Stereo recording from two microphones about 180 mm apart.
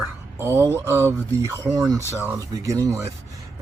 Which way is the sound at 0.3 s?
15° right (ahead or behind).